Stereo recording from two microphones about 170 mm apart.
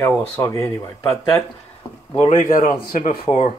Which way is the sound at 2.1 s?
45° left (ahead or behind).